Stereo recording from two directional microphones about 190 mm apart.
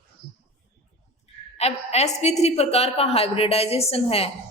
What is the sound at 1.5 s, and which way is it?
A woman's voice, 35° left (ahead or behind).